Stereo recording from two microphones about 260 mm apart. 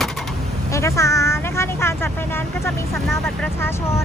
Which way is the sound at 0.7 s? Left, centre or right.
Centre.